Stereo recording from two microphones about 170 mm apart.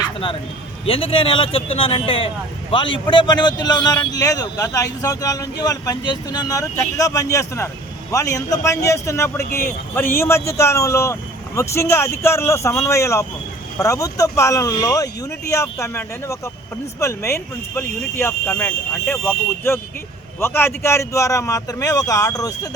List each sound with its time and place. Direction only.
0.9 s speech: 35° left (ahead or behind)